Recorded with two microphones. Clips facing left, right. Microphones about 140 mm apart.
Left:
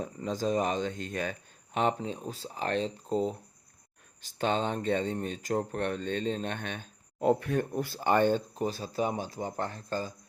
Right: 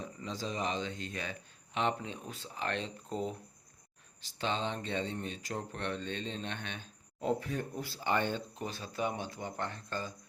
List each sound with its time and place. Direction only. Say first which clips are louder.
0.0 s speech: left 8 dB; 45° left (ahead or behind)
4.2 s speech: left 6 dB; 50° left (ahead or behind)